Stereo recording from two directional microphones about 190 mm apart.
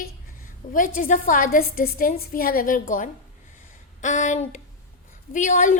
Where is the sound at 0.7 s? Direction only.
45° left (ahead or behind).